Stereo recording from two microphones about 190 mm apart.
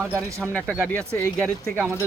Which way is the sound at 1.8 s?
15° right (ahead or behind).